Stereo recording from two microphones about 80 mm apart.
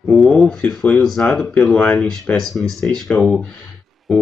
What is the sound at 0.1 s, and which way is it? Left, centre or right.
Speech, centre.